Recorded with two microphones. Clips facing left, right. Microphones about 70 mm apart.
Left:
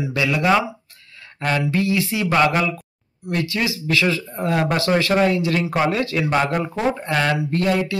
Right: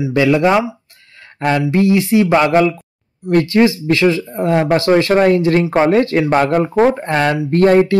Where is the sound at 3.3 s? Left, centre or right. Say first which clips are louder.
Right 11 dB; right.